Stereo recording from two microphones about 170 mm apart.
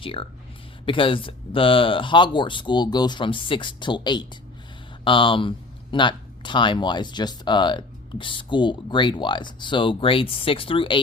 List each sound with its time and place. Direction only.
0.0 s speech: 30° left (ahead or behind)